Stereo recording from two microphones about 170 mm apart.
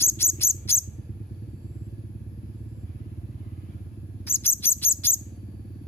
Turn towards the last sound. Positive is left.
turn(degrees=15)  # may be behind; listen again after turning